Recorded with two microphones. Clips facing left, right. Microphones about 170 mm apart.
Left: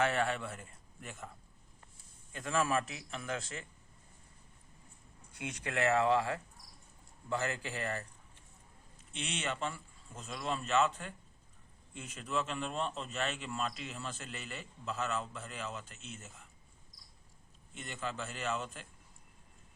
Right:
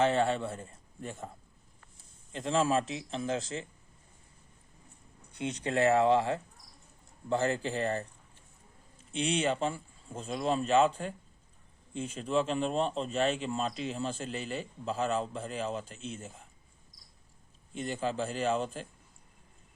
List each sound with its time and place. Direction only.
0.0 s a man's voice: 25° right (ahead or behind)
2.3 s a man's voice: 25° right (ahead or behind)
5.3 s a man's voice: 20° right (ahead or behind)
9.1 s speech: 35° right (ahead or behind)
17.7 s speech: 35° right (ahead or behind)